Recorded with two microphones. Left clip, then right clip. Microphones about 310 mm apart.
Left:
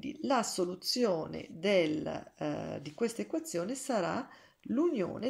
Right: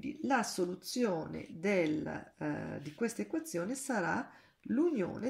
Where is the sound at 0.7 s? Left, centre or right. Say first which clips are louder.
Left 4 dB; centre.